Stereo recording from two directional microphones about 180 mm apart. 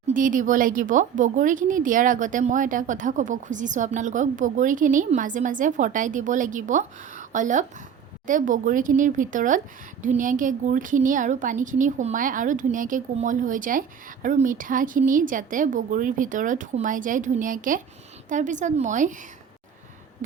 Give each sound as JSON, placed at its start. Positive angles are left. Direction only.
{"t": 0.1, "sound": "a woman's voice", "side_deg": -45}